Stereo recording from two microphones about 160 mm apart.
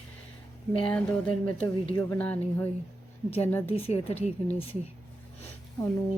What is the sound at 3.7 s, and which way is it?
Speech, 35° left (ahead or behind).